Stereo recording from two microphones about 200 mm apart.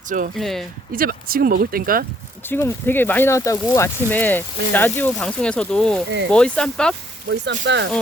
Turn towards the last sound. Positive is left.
turn(degrees=-65)  # may be behind; listen again after turning